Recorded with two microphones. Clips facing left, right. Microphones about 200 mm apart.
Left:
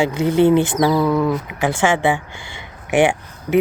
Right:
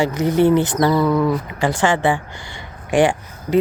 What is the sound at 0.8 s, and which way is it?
Speech, 5° left (ahead or behind).